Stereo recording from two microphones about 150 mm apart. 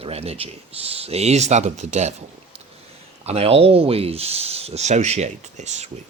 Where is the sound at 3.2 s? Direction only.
40° right (ahead or behind).